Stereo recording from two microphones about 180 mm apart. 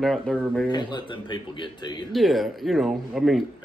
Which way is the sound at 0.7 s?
25° left (ahead or behind).